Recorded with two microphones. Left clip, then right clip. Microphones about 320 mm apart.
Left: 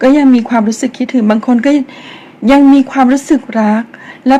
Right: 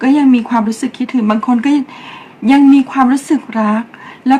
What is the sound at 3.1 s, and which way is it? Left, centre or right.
Speech, centre.